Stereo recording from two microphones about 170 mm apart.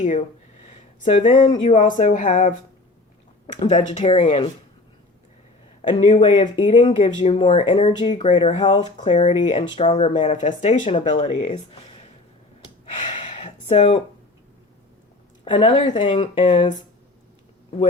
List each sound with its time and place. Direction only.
1.0 s speech: 45° left (ahead or behind)
3.5 s speech: 45° left (ahead or behind)
6.2 s speech: 40° left (ahead or behind)
8.6 s speech: 30° left (ahead or behind)
12.8 s gasp: 35° left (ahead or behind)
15.4 s speech: 30° left (ahead or behind)